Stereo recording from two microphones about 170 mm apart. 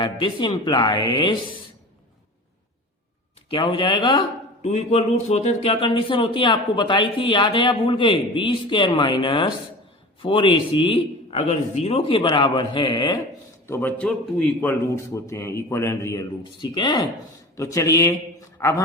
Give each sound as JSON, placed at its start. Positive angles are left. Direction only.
{"t": 0.0, "sound": "speech", "side_deg": 25}
{"t": 3.5, "sound": "speech", "side_deg": 30}
{"t": 4.6, "sound": "speech", "side_deg": 40}
{"t": 13.7, "sound": "a man's voice", "side_deg": 10}
{"t": 16.4, "sound": "speech", "side_deg": 25}